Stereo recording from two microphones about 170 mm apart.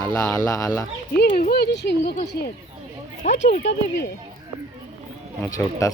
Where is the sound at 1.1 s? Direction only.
65° left (ahead or behind).